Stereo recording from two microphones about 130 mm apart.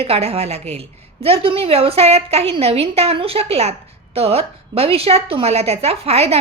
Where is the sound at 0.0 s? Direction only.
50° right (ahead or behind).